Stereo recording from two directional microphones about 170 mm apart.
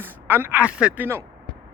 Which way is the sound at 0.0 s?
10° right (ahead or behind).